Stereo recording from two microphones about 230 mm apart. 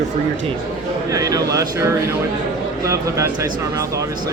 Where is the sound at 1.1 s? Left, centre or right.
Centre.